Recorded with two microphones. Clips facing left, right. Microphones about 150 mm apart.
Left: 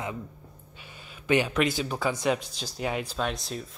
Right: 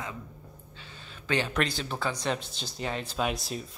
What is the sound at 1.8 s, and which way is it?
Speech, 5° left (ahead or behind).